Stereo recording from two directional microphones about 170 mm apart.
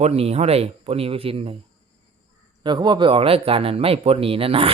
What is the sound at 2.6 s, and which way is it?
Speech, 25° right (ahead or behind).